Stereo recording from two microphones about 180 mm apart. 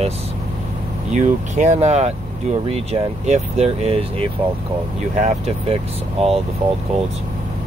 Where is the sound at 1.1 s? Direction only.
40° right (ahead or behind).